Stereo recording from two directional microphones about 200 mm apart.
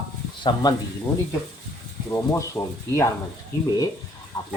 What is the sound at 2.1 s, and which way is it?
Speech, 15° left (ahead or behind).